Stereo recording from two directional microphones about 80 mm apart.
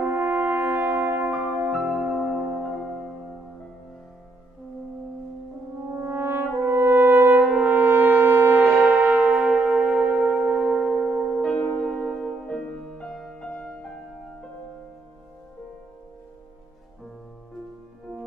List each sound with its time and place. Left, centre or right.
0.0 s brass instrument: centre
1.8 s music: centre
5.9 s french horn: right
7.4 s brass instrument: centre
7.7 s brass instrument: right
8.6 s brass instrument: centre
8.9 s music: centre
11.4 s music: centre
11.8 s music: centre